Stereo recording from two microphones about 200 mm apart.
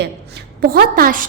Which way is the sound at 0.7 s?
45° right (ahead or behind).